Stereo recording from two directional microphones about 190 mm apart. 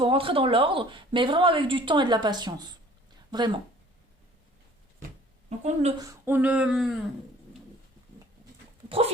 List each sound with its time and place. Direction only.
0.0 s speech: 30° right (ahead or behind)
5.5 s a woman's voice: 35° right (ahead or behind)
6.0 s a sound: 15° right (ahead or behind)